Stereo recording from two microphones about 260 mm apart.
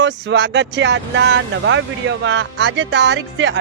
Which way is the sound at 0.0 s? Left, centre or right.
Right.